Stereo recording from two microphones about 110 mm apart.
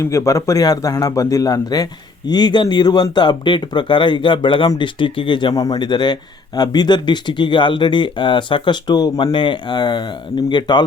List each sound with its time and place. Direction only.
0.0 s speech: 25° left (ahead or behind); by 10.8 s 40° left (ahead or behind)